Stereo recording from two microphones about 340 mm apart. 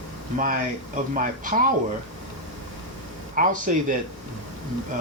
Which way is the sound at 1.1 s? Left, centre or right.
Right.